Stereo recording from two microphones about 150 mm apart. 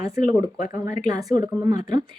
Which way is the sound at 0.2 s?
65° left (ahead or behind).